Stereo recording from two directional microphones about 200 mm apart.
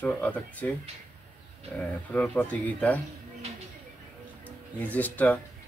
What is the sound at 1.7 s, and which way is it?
Speech, 5° left (ahead or behind).